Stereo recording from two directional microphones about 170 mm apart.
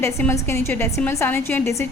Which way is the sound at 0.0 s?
15° left (ahead or behind).